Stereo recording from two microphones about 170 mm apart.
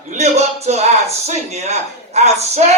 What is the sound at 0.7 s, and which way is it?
Speech, 40° right (ahead or behind).